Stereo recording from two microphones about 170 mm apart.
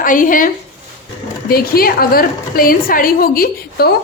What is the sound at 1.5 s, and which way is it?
A woman's voice, 60° left (ahead or behind).